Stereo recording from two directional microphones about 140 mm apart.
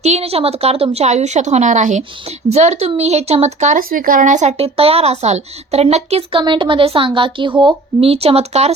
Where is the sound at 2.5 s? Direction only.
50° right (ahead or behind).